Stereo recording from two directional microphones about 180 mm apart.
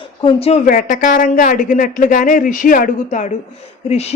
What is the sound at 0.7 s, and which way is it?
A man's voice, 50° left (ahead or behind).